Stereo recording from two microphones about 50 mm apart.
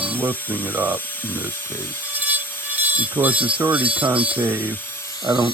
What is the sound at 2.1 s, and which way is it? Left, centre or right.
Tools, right.